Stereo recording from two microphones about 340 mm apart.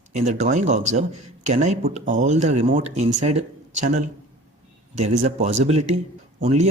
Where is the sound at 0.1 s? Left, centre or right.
Centre.